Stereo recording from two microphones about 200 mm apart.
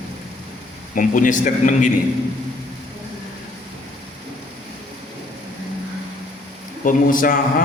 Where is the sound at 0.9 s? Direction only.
40° left (ahead or behind).